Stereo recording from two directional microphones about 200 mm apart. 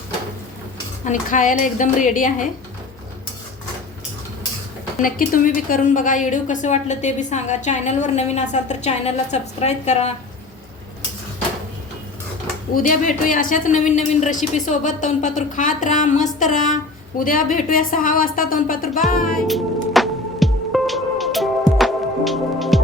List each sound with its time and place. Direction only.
1.0 s a woman's voice: 40° left (ahead or behind)
5.0 s a woman's voice: 45° left (ahead or behind)
12.7 s a woman's voice: 40° left (ahead or behind)
19.5 s music: centre (ahead or behind)